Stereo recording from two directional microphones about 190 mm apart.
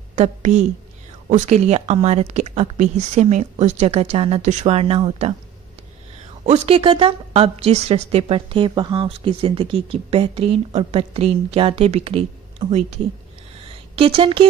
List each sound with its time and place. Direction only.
0.1 s a woman's voice: 35° right (ahead or behind)
6.4 s a woman's voice: 35° right (ahead or behind)